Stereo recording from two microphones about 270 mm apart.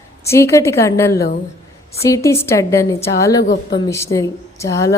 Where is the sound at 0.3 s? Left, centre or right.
Centre.